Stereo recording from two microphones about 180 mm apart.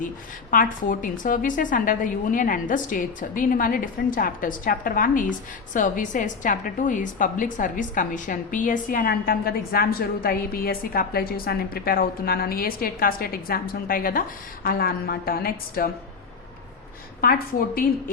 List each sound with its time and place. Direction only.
0.5 s a woman's voice: 50° left (ahead or behind)
17.2 s a woman's voice: 55° left (ahead or behind)